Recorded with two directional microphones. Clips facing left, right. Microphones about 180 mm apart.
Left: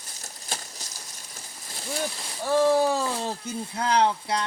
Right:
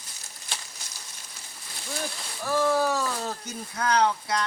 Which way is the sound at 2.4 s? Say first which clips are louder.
Left 3 dB; 25° left (ahead or behind).